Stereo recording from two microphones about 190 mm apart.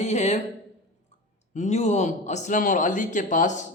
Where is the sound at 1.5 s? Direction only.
40° left (ahead or behind).